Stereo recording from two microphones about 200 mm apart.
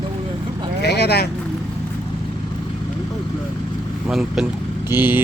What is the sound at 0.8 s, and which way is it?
Speech, 55° left (ahead or behind).